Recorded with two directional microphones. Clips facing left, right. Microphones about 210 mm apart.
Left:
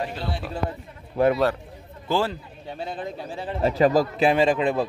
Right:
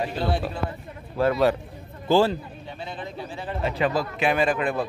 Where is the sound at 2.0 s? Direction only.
30° right (ahead or behind).